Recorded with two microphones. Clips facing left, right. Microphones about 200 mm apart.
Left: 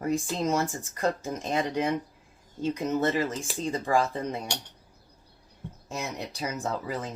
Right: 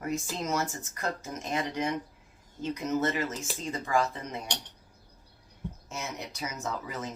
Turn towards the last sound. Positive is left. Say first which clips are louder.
# left 4 dB
turn(degrees=30)  # may be behind; listen again after turning